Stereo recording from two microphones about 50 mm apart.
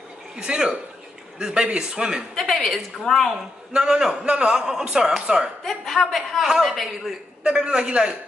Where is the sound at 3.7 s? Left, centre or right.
Centre.